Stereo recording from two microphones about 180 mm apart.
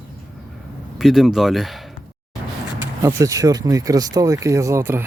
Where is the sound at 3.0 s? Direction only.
20° right (ahead or behind).